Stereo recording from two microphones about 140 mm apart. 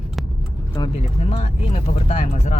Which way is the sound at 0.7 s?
40° left (ahead or behind).